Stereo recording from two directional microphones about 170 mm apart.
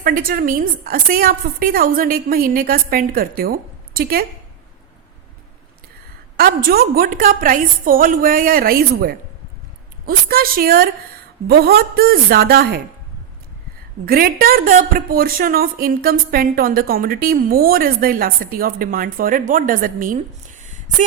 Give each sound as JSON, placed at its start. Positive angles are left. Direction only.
{"t": 0.0, "sound": "speech", "side_deg": -60}
{"t": 6.3, "sound": "speech", "side_deg": -60}
{"t": 14.0, "sound": "speech", "side_deg": -60}
{"t": 20.6, "sound": "a sound", "side_deg": -50}